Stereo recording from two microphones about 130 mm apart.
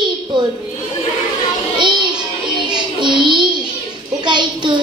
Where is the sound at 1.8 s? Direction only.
35° right (ahead or behind).